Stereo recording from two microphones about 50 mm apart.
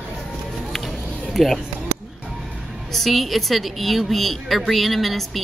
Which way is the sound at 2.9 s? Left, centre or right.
Centre.